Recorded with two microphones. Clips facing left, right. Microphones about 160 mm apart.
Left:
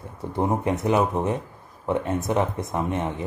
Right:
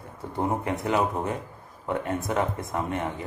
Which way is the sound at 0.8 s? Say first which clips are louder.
Left 3 dB; 20° left (ahead or behind).